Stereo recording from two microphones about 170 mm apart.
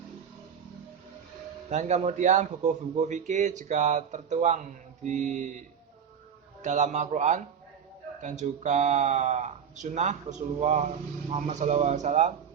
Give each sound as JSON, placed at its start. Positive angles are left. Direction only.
{"t": 1.7, "sound": "a man's voice", "side_deg": -40}